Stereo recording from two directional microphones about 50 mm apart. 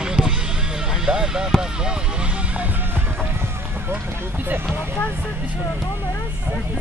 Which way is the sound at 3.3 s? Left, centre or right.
Right.